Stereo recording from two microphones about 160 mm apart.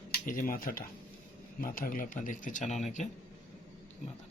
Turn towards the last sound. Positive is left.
turn(degrees=45)  # may be behind; listen again after turning